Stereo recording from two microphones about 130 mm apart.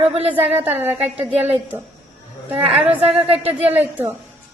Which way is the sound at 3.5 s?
10° right (ahead or behind).